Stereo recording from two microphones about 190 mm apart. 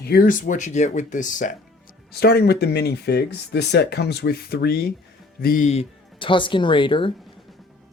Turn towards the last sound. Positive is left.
turn(degrees=25)  # may be behind; listen again after turning